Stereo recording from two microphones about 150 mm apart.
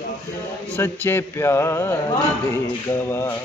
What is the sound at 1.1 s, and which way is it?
Mantra, 15° left (ahead or behind).